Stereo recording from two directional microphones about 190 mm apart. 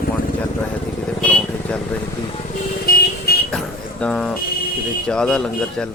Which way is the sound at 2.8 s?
55° left (ahead or behind).